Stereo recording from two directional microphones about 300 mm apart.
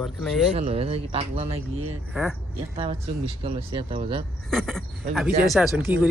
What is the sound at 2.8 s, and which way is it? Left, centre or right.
Speech, centre.